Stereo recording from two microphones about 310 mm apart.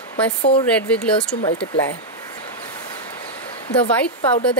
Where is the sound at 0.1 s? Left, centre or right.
Centre.